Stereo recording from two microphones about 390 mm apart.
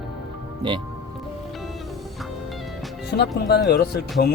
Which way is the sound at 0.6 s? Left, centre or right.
Centre.